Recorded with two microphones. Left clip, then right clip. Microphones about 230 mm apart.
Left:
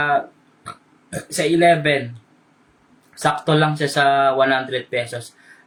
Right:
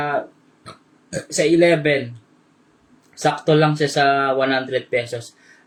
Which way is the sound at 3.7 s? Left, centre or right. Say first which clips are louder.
Left 1 dB; centre.